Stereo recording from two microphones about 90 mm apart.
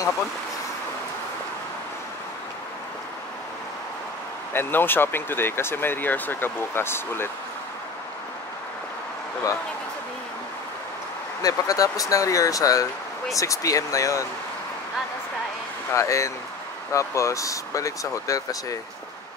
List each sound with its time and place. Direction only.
4.6 s speech: 25° left (ahead or behind)
11.4 s speech: 40° left (ahead or behind)
15.9 s speech: 35° left (ahead or behind)